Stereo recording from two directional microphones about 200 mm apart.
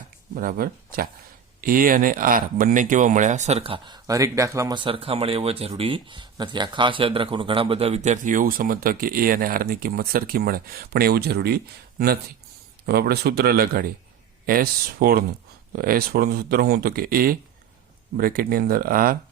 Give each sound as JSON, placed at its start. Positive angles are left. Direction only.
{"t": 0.3, "sound": "speech", "side_deg": -45}